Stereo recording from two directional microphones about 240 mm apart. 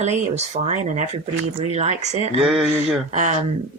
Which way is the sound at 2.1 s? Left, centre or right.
Right.